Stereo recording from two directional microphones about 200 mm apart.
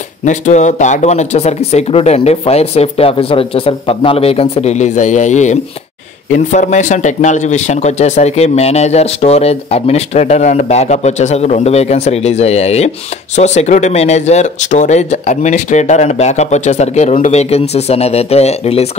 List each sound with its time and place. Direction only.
0.2 s speech: 35° left (ahead or behind)